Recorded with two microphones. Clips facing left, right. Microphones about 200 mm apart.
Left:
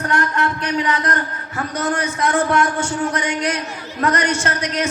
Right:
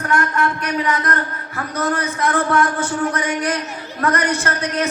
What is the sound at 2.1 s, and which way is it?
A man's voice, 25° left (ahead or behind).